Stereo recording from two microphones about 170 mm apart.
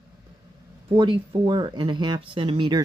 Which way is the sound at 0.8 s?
30° right (ahead or behind).